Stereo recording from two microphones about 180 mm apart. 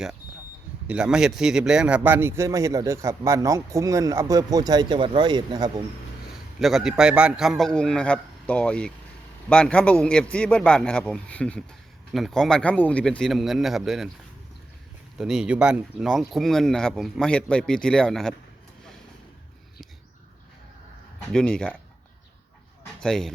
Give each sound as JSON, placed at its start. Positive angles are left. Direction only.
{"t": 0.9, "sound": "speech", "side_deg": -5}
{"t": 6.6, "sound": "speech", "side_deg": 0}
{"t": 15.2, "sound": "speech", "side_deg": -5}
{"t": 21.3, "sound": "speech", "side_deg": 5}
{"t": 23.0, "sound": "speech", "side_deg": 5}